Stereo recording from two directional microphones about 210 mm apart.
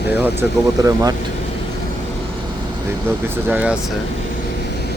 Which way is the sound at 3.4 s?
5° right (ahead or behind).